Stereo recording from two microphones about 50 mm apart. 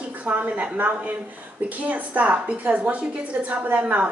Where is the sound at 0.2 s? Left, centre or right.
Right.